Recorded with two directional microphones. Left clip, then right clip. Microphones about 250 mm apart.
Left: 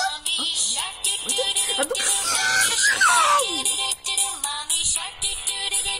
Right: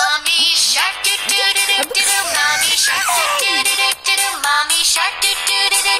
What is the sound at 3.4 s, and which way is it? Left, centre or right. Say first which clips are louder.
Music: right 10 dB; right.